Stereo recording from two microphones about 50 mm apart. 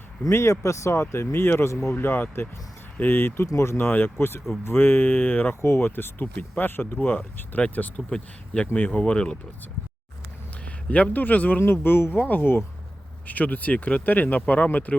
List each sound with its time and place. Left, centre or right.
0.3 s speech: left
1.1 s speech: left
1.9 s speech: left
3.4 s speech: left
3.8 s speech: left
5.6 s speech: left
7.8 s speech: left
10.7 s a man's voice: left
11.6 s speech: left
12.1 s speech: left
12.4 s speech: left
13.2 s speech: left